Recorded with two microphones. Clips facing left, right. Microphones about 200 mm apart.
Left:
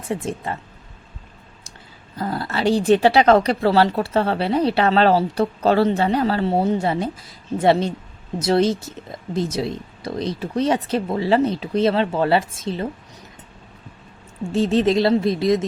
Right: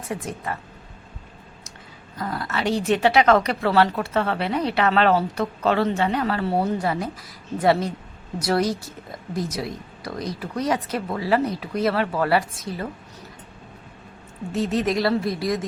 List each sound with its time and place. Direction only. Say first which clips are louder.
0.0 s speech: left 4 dB; 25° left (ahead or behind)
2.1 s speech: left 3 dB; 30° left (ahead or behind)
14.4 s speech: left 5 dB; 30° left (ahead or behind)